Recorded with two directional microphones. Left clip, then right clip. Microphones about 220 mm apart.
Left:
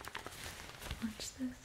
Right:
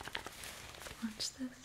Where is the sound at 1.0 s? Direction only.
15° left (ahead or behind).